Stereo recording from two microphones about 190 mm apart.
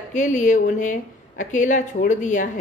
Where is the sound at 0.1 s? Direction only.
40° left (ahead or behind).